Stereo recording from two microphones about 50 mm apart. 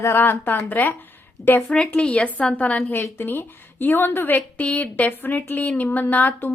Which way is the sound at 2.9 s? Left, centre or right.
Left.